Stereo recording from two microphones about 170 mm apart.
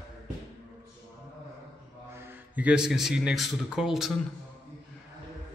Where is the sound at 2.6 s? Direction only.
5° right (ahead or behind).